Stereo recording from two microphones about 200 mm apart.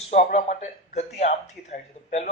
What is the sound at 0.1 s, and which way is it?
Speech, 35° left (ahead or behind).